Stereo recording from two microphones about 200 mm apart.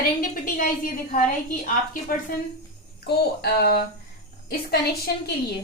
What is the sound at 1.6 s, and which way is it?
Speech, 40° left (ahead or behind).